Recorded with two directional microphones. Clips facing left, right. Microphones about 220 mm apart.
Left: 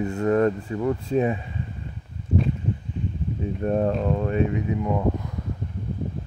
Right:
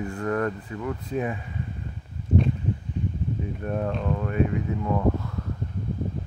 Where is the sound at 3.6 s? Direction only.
30° left (ahead or behind).